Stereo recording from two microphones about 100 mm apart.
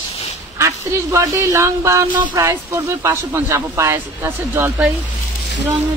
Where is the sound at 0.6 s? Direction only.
30° right (ahead or behind).